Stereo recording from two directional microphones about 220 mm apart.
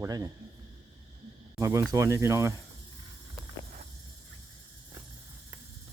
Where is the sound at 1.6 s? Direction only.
15° right (ahead or behind).